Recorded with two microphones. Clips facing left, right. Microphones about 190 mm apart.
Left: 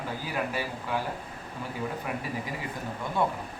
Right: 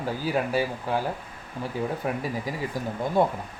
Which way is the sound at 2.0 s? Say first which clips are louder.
Right 5 dB; 35° right (ahead or behind).